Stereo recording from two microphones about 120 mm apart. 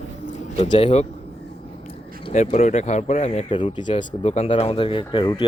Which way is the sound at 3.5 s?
45° left (ahead or behind).